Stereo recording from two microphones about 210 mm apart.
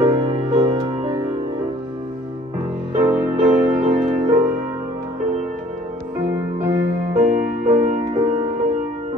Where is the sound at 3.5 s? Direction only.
35° right (ahead or behind).